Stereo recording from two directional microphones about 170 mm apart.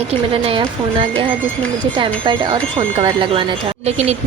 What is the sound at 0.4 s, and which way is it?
Speech, 30° right (ahead or behind).